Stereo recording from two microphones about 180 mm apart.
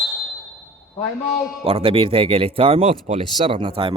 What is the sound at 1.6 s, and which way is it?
Speech, 30° right (ahead or behind).